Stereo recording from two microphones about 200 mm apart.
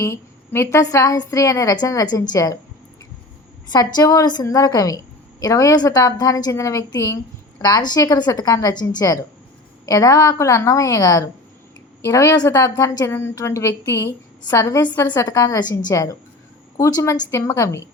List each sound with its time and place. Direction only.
0.0 s a woman's voice: 15° left (ahead or behind)
3.7 s a woman's voice: 20° left (ahead or behind)